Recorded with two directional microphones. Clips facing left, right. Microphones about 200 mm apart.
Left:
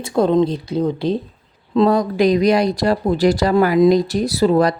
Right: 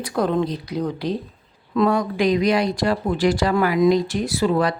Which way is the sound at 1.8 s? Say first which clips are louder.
Left 4 dB; 35° left (ahead or behind).